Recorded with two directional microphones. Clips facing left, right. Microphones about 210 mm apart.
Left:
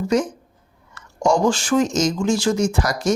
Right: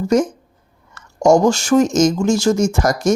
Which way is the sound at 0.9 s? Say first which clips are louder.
Right 6 dB; 45° right (ahead or behind).